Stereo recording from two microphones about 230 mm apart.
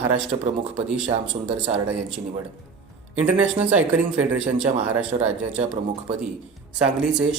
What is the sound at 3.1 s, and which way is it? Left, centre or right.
Speech, centre.